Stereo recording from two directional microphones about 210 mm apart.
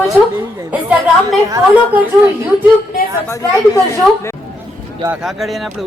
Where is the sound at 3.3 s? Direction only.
15° left (ahead or behind).